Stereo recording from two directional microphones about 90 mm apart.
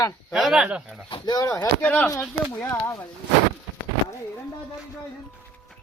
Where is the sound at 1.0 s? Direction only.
70° left (ahead or behind).